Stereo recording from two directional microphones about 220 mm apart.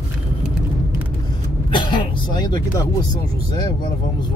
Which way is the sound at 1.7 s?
20° left (ahead or behind).